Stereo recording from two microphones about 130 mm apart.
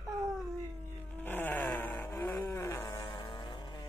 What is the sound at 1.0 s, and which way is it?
Vehicle, 15° left (ahead or behind).